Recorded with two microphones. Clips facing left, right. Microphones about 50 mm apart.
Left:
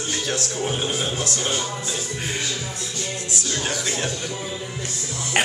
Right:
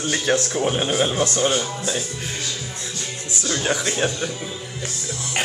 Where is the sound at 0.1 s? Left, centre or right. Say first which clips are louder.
Right 7 dB; right.